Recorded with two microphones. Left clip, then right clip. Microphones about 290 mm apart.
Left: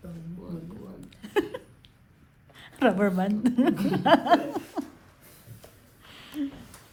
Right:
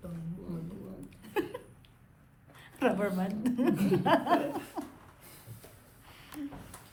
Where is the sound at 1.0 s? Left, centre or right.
Left.